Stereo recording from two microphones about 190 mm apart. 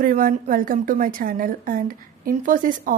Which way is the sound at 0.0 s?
45° right (ahead or behind).